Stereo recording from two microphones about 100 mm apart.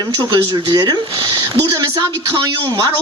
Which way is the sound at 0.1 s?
45° right (ahead or behind).